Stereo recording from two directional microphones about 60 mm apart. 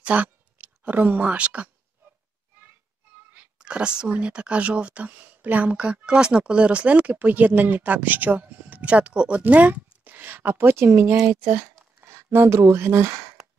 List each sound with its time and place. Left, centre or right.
0.0 s speech: right
3.5 s speech: centre; by 13.3 s right